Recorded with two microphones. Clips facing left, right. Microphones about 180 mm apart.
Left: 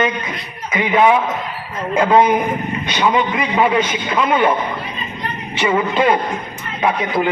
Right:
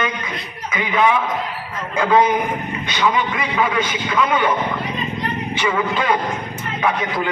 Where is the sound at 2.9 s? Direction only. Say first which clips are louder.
Left 3 dB; 20° left (ahead or behind).